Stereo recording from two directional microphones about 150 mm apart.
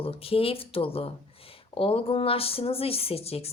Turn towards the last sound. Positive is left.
turn(degrees=40)  # may be behind; listen again after turning